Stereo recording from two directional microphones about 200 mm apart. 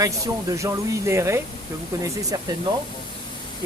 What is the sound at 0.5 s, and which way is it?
Speech, 15° right (ahead or behind).